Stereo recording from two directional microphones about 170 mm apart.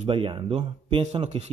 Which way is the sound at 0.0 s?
30° right (ahead or behind).